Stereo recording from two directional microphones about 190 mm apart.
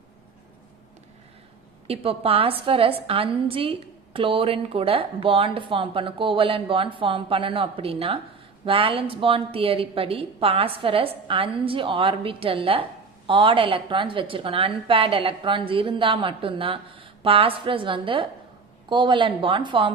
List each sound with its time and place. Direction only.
1.9 s a woman's voice: 30° right (ahead or behind)